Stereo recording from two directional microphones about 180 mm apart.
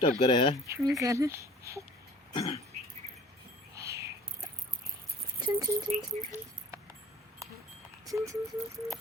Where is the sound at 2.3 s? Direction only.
30° left (ahead or behind).